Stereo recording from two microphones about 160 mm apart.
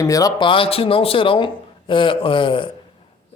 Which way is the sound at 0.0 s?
20° left (ahead or behind).